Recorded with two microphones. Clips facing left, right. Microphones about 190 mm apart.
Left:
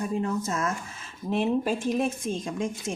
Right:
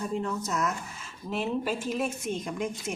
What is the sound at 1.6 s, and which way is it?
A woman's voice, 30° left (ahead or behind).